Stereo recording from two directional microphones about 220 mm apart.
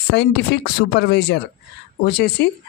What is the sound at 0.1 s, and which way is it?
Speech, 50° left (ahead or behind).